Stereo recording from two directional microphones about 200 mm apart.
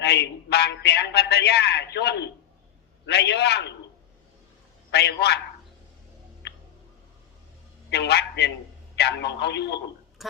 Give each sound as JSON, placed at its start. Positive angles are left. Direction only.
{"t": 0.0, "sound": "a man's voice", "side_deg": 55}
{"t": 4.9, "sound": "a man's voice", "side_deg": 55}
{"t": 7.9, "sound": "a man's voice", "side_deg": 55}
{"t": 10.2, "sound": "a sound", "side_deg": 0}